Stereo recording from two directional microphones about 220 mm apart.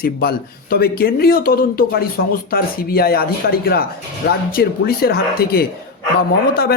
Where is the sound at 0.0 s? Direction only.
45° left (ahead or behind).